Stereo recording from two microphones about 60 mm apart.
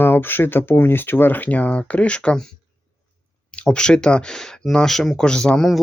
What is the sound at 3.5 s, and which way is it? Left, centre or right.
Speech, centre.